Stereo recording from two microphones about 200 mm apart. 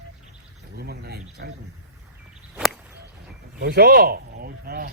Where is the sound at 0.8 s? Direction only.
55° right (ahead or behind).